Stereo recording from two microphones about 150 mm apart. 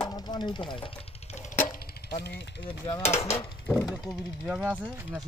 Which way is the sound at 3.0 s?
15° left (ahead or behind).